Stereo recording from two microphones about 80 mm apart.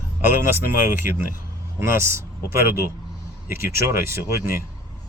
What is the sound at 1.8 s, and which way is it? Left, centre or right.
Speech, right.